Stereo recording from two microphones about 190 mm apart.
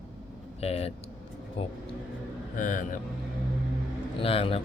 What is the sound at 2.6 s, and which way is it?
Speech, 45° left (ahead or behind).